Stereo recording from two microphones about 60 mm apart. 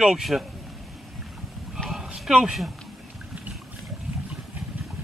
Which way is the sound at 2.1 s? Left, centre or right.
Centre.